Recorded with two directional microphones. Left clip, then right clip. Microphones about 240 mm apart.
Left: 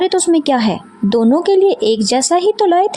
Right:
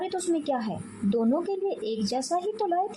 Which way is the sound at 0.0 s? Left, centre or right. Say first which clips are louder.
Left 15 dB; left.